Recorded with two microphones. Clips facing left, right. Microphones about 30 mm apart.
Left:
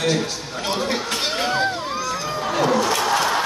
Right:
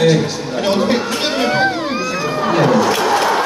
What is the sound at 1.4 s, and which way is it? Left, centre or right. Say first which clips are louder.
Crowd: right 6 dB; right.